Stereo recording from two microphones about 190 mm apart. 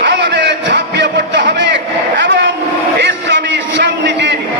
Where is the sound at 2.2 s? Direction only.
70° right (ahead or behind).